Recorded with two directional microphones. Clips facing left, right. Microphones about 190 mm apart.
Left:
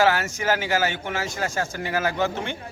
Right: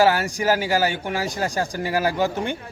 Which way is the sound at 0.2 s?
40° right (ahead or behind).